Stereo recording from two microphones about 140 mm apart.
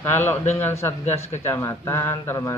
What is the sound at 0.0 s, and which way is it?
A man's voice, 15° left (ahead or behind).